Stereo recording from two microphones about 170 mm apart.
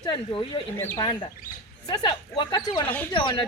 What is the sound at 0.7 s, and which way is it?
Speech, 10° left (ahead or behind).